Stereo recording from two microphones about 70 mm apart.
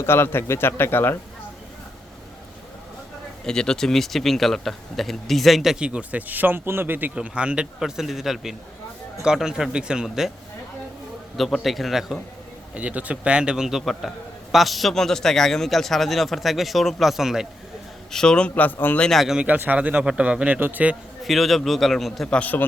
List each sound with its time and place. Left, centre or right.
0.0 s a man's voice: left
3.4 s a man's voice: centre
5.8 s speech: centre
7.2 s a man's voice: centre
11.3 s a man's voice: centre
12.7 s a man's voice: centre
18.1 s speech: centre; by 18.9 s left
19.1 s a man's voice: centre
19.4 s speech: right
21.2 s a man's voice: centre
22.3 s a man's voice: left